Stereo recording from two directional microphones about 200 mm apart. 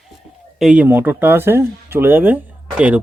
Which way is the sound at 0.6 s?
5° right (ahead or behind).